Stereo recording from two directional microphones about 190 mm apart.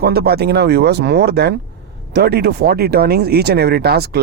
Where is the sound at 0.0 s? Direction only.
55° right (ahead or behind).